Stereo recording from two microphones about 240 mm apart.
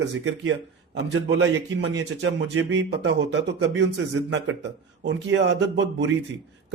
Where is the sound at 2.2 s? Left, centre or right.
Right.